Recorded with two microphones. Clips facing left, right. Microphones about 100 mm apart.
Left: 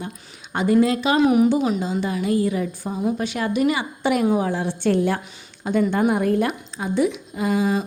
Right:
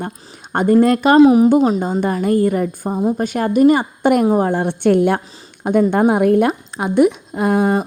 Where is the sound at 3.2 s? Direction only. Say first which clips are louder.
Right 10 dB; 45° right (ahead or behind).